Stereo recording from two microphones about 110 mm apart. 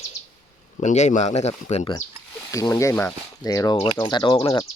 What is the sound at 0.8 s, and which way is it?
Speech, 90° left.